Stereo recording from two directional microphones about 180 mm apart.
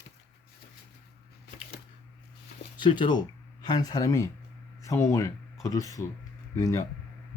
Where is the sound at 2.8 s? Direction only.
25° left (ahead or behind).